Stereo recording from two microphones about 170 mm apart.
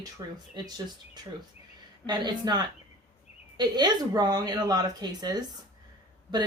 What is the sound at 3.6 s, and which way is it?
Speech, 25° right (ahead or behind).